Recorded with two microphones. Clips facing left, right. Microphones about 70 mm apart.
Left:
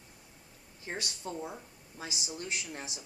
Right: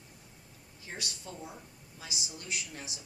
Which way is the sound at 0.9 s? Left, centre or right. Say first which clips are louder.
Left 4 dB; left.